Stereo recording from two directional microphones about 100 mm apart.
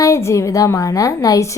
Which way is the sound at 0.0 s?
30° left (ahead or behind).